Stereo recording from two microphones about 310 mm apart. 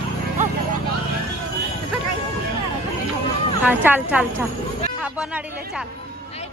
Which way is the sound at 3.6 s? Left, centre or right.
Centre.